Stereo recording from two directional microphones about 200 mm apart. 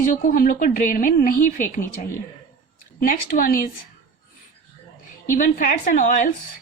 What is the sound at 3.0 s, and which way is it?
Speech, 45° left (ahead or behind).